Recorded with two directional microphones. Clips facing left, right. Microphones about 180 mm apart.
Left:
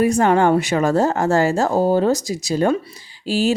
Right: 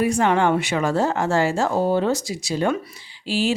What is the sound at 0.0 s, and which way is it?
Speech, 45° left (ahead or behind).